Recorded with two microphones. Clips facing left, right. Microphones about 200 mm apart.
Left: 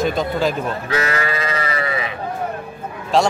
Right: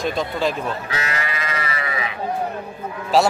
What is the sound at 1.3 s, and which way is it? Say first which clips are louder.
Livestock: left 4 dB; 35° left (ahead or behind).